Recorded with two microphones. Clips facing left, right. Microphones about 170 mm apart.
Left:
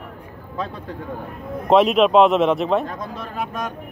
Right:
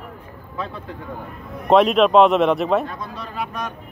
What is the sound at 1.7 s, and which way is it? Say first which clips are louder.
A man's voice: even; centre (ahead or behind).